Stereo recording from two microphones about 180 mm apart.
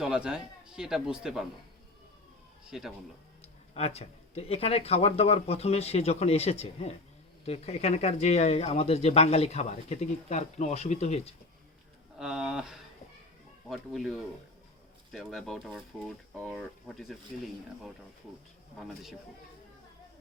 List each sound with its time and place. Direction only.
0.0 s speech: 5° right (ahead or behind)
2.6 s speech: centre (ahead or behind)
3.8 s speech: 35° left (ahead or behind)
12.2 s speech: centre (ahead or behind)